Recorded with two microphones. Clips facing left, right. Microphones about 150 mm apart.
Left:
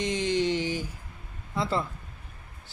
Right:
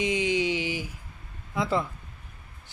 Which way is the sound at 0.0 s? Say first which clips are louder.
Right 1 dB; 10° right (ahead or behind).